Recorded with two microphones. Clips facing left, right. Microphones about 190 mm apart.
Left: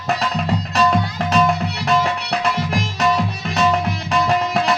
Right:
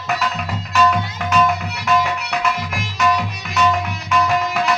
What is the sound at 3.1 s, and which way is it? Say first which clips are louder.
Music: left 1 dB; 30° left (ahead or behind).